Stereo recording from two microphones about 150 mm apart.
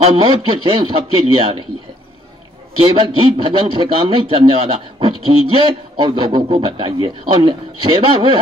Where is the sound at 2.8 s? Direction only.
35° right (ahead or behind).